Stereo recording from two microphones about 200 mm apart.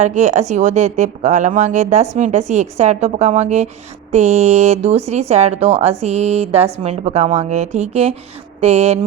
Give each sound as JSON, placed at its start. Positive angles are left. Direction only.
{"t": 0.0, "sound": "a woman's voice", "side_deg": -35}